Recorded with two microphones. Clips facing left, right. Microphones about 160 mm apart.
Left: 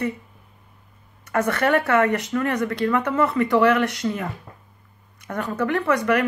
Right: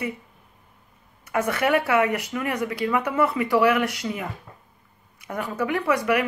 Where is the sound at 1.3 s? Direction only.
10° right (ahead or behind).